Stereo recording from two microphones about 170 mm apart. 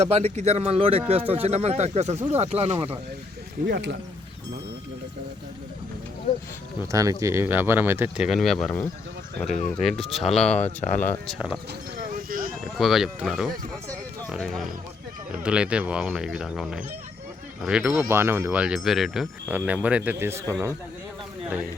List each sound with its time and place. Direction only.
0.0 s speech: 40° right (ahead or behind)
3.7 s speech: 90° right
6.9 s speech: 20° right (ahead or behind); by 10.6 s 5° left (ahead or behind)
10.8 s speech: 45° left (ahead or behind)
11.3 s speech: 5° right (ahead or behind)
12.3 s a sound: 55° right (ahead or behind)
12.7 s speech: centre (ahead or behind)